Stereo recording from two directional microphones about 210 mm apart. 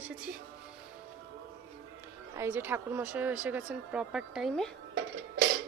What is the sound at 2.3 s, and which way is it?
A woman's voice, 10° right (ahead or behind).